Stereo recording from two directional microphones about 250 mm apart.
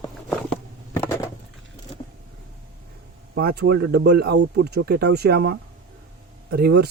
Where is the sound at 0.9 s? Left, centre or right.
Centre.